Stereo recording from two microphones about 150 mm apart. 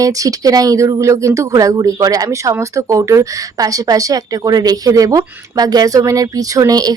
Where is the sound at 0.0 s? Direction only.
25° right (ahead or behind).